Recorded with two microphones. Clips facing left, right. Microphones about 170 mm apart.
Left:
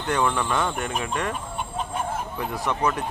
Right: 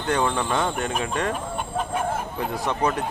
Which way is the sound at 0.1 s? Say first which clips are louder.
Right 1 dB; 25° right (ahead or behind).